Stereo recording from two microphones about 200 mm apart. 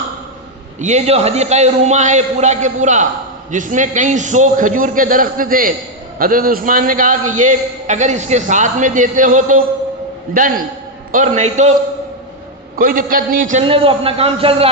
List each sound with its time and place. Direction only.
0.8 s a man's voice: 35° right (ahead or behind)
12.7 s a man's voice: 45° right (ahead or behind)
13.7 s a man's voice: 25° right (ahead or behind)